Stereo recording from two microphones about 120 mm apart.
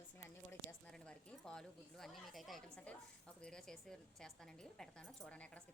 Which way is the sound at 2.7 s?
10° left (ahead or behind).